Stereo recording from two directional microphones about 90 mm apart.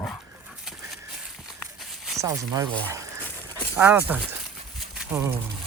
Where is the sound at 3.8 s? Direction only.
20° right (ahead or behind).